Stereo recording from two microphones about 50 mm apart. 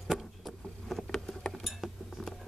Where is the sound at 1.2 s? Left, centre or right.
Centre.